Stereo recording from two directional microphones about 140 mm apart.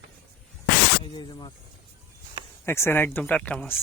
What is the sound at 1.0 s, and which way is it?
Speech, 35° left (ahead or behind).